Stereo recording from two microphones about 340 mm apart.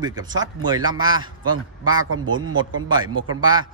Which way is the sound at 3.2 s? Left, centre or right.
Centre.